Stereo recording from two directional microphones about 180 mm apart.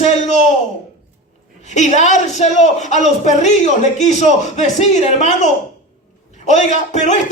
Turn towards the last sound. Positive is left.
turn(degrees=40)  # may be behind; listen again after turning